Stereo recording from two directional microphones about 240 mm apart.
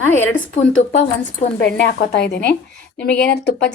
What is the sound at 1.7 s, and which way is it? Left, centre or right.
A woman's voice, left.